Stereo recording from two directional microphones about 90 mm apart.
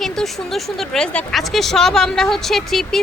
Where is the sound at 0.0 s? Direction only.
5° left (ahead or behind).